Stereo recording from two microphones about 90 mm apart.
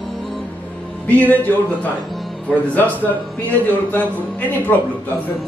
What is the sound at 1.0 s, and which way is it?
Speech, 15° left (ahead or behind).